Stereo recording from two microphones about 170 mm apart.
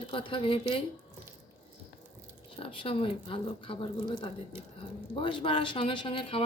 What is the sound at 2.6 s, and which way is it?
Speech, 30° left (ahead or behind).